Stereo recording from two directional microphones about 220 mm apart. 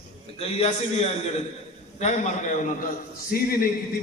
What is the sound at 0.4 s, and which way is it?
A man's voice, 30° left (ahead or behind).